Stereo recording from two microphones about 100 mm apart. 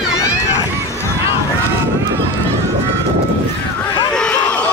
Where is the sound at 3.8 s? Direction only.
10° left (ahead or behind).